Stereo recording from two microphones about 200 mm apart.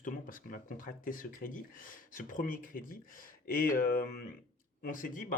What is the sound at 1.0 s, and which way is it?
Speech, 45° left (ahead or behind).